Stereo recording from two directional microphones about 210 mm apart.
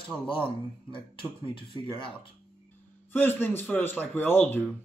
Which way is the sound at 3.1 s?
10° left (ahead or behind).